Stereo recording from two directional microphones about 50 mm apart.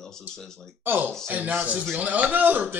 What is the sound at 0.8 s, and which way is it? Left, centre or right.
Speech, right.